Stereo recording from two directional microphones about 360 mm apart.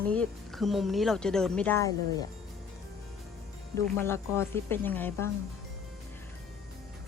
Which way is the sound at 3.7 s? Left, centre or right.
Centre.